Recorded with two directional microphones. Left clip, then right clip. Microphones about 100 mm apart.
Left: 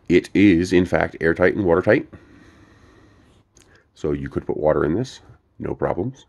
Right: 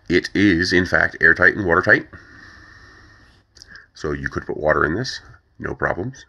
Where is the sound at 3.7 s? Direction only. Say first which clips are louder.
Left 1 dB; 50° left (ahead or behind).